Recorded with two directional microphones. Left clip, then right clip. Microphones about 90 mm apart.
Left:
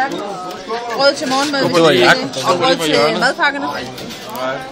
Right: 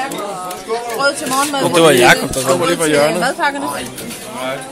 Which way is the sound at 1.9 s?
30° right (ahead or behind).